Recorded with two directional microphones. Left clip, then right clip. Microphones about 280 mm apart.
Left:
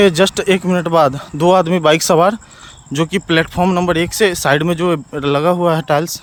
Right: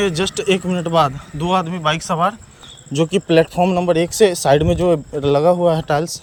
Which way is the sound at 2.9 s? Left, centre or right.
Centre.